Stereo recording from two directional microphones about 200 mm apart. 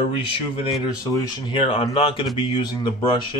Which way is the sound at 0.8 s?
20° left (ahead or behind).